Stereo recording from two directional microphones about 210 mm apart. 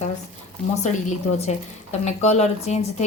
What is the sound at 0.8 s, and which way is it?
A woman's voice, 35° left (ahead or behind).